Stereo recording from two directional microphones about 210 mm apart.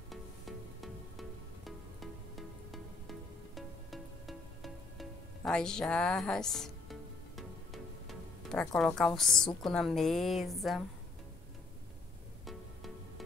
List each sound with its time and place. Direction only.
0.1 s music: centre (ahead or behind)
9.6 s a woman's voice: centre (ahead or behind)